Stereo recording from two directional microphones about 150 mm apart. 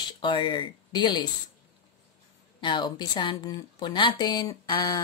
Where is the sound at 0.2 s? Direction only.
35° left (ahead or behind).